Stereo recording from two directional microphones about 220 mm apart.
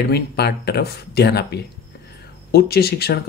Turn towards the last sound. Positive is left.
turn(degrees=45)  # may be behind; listen again after turning